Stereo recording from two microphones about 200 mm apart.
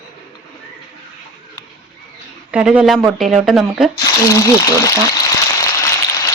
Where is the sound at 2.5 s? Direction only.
5° right (ahead or behind).